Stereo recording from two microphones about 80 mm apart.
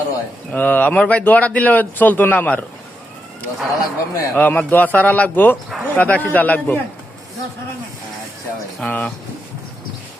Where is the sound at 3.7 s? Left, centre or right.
Left.